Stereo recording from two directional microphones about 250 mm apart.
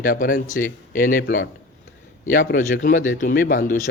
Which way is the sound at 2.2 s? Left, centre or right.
Left.